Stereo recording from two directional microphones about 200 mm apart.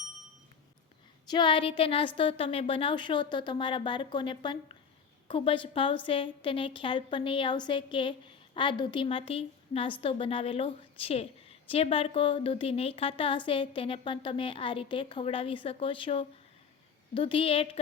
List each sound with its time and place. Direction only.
1.3 s a woman's voice: 25° left (ahead or behind)